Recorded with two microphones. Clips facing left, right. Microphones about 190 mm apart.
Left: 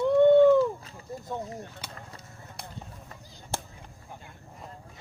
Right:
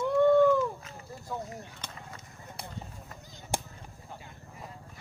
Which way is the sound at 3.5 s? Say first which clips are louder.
Right 1 dB; 15° right (ahead or behind).